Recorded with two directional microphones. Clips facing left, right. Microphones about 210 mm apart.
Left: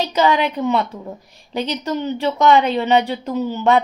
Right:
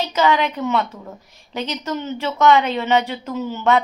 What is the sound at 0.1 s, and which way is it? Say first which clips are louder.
A woman's voice: even; 30° left (ahead or behind).